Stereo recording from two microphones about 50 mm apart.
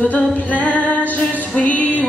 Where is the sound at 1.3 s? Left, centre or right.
Left.